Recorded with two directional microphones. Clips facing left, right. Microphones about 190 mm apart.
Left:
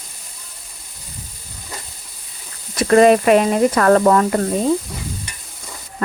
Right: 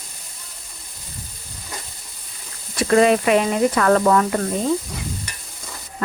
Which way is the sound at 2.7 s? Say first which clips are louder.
Left 4 dB; 45° left (ahead or behind).